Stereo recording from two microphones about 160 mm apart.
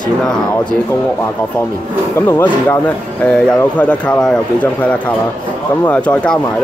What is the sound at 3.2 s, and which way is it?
Speech, 5° left (ahead or behind).